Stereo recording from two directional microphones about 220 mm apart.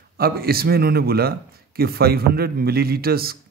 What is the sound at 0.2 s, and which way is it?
A man's voice, 45° right (ahead or behind).